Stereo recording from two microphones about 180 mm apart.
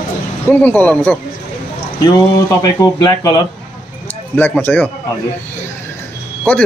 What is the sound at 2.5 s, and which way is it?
Speech, 20° left (ahead or behind).